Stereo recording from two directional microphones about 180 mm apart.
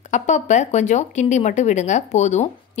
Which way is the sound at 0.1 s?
40° left (ahead or behind).